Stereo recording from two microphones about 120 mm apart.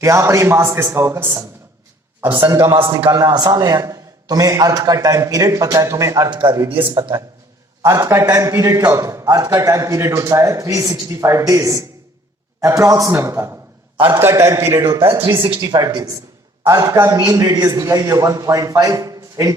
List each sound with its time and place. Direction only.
0.0 s a man's voice: 25° right (ahead or behind)
3.1 s a man's voice: 30° right (ahead or behind)
7.8 s a man's voice: 25° right (ahead or behind)